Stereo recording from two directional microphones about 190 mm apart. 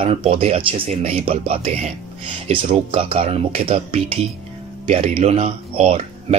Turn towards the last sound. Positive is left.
turn(degrees=-30)  # may be behind; listen again after turning